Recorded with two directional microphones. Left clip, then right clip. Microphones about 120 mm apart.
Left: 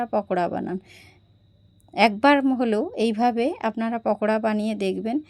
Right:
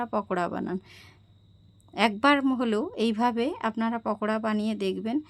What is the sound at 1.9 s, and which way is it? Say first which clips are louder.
A woman's voice: left 5 dB; 25° left (ahead or behind).